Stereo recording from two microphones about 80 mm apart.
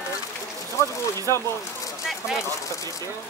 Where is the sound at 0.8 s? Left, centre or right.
Left.